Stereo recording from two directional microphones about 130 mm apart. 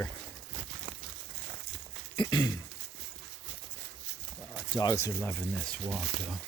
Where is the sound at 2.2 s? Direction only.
35° left (ahead or behind).